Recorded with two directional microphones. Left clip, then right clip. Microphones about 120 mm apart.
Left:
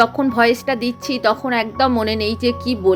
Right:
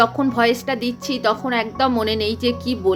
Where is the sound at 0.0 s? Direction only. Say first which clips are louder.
Left 2 dB; 40° left (ahead or behind).